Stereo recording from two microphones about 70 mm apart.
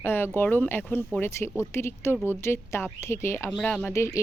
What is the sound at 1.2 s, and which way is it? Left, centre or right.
Speech, left.